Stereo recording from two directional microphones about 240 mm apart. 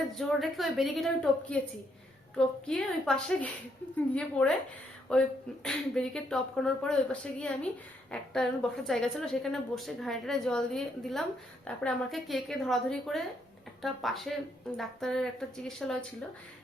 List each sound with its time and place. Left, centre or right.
0.1 s a woman's voice: centre
5.6 s a woman's voice: centre